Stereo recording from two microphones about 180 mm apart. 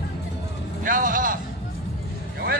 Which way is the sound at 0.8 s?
50° right (ahead or behind).